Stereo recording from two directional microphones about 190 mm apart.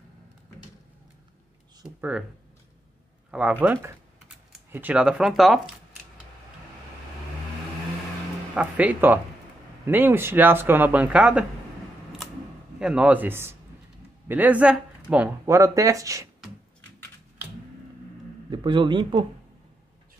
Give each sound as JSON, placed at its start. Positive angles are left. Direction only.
{"t": 2.0, "sound": "speech", "side_deg": -5}
{"t": 3.3, "sound": "speech", "side_deg": -5}
{"t": 8.5, "sound": "speech", "side_deg": -10}
{"t": 12.7, "sound": "speech", "side_deg": -5}
{"t": 18.5, "sound": "a man's voice", "side_deg": -25}